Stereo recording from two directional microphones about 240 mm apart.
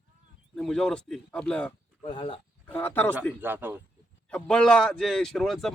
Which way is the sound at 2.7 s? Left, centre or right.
Centre.